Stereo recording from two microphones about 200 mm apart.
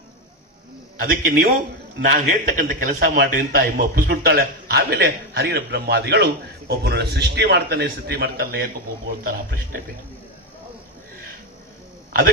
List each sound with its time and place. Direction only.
0.9 s a man's voice: 45° right (ahead or behind)